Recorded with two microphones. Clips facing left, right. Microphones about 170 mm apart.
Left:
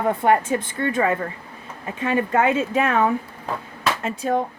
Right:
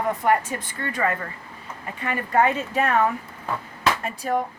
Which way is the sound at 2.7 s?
90° left.